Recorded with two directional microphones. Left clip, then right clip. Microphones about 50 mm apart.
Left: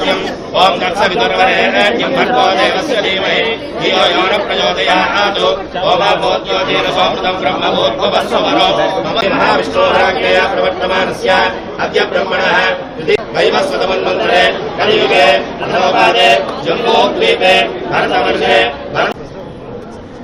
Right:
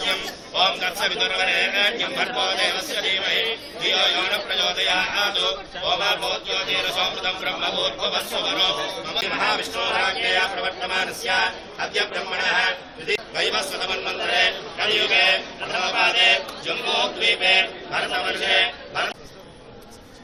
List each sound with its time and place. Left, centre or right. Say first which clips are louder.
0.0 s a man's voice: left 10 dB; right